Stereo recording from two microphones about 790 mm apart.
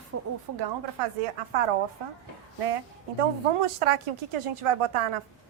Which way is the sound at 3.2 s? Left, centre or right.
Right.